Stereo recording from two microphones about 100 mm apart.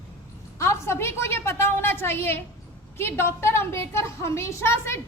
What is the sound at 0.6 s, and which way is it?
A woman's voice, 25° left (ahead or behind).